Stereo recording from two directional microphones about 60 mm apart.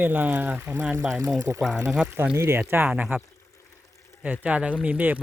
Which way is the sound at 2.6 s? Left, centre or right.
Right.